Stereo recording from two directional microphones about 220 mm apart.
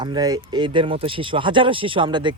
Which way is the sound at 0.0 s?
20° right (ahead or behind).